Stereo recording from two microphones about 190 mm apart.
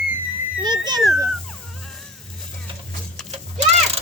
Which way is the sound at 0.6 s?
20° right (ahead or behind).